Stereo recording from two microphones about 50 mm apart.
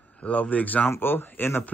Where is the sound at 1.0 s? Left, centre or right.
Left.